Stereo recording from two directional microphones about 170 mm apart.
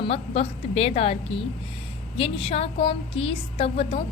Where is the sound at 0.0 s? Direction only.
35° left (ahead or behind).